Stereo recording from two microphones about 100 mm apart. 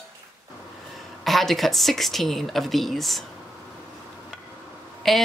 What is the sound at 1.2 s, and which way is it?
Speech, centre (ahead or behind).